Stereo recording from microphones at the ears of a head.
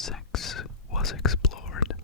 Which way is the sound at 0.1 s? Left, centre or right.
Left.